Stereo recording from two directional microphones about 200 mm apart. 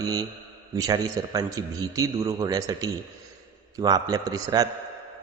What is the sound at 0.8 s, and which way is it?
A man's voice, 20° right (ahead or behind).